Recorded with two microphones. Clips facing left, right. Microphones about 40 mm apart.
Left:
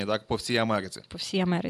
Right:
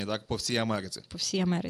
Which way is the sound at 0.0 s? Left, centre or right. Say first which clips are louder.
Left 4 dB; centre.